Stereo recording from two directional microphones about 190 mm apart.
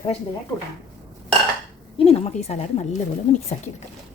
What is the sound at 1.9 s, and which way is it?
A woman's voice, 30° left (ahead or behind).